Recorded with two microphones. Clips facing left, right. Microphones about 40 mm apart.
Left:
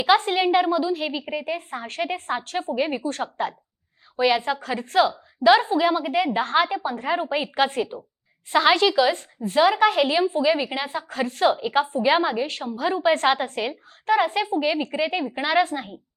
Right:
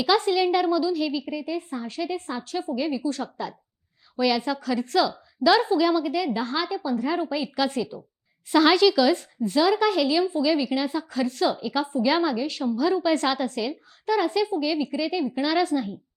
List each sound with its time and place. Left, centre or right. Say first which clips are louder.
0.0 s speech: left 2 dB; left
4.2 s speech: left 2 dB; left